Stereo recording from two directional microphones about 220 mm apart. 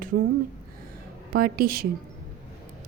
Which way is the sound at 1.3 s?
45° right (ahead or behind).